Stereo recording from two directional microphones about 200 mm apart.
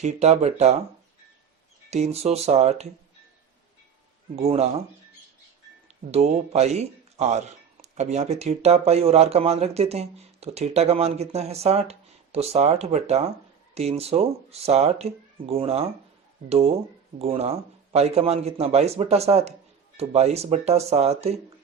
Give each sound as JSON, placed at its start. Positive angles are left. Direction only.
{"t": 0.0, "sound": "speech", "side_deg": -35}
{"t": 1.9, "sound": "speech", "side_deg": -35}
{"t": 4.4, "sound": "speech", "side_deg": -30}
{"t": 6.1, "sound": "speech", "side_deg": -35}